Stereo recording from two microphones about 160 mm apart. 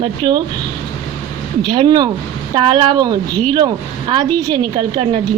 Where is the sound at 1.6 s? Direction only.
30° right (ahead or behind).